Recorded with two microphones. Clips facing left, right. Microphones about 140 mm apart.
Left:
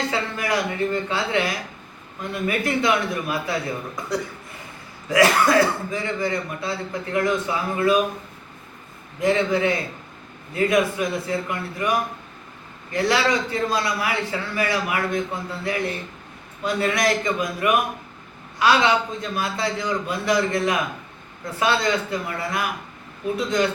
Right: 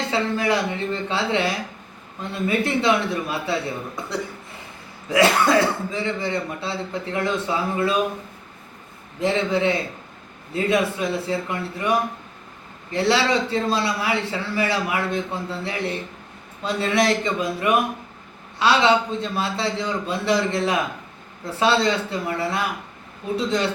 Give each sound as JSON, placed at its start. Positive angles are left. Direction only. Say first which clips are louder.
{"t": 0.1, "sound": "a man's voice", "louder": "right 3 dB", "side_deg": -25}
{"t": 9.2, "sound": "a man's voice", "louder": "left 1 dB", "side_deg": -25}